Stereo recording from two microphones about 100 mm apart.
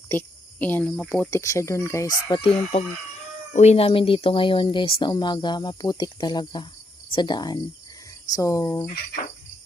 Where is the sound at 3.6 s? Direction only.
85° left; by 7.6 s 45° left (ahead or behind).